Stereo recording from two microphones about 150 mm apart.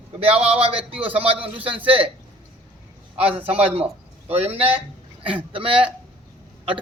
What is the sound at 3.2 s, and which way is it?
A man's voice, 40° right (ahead or behind).